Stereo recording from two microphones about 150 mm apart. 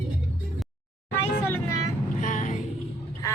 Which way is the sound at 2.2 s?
55° left (ahead or behind).